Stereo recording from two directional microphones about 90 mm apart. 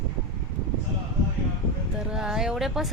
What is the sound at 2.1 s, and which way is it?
Speech, 5° right (ahead or behind).